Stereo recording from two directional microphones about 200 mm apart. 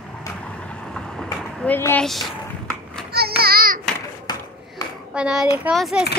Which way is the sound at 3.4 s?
50° right (ahead or behind).